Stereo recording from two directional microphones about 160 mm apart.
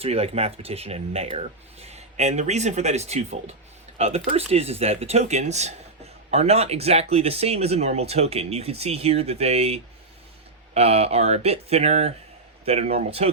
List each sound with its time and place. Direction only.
0.0 s speech: 40° right (ahead or behind)